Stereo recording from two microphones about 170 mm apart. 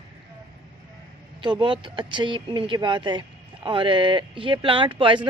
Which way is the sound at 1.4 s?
30° right (ahead or behind).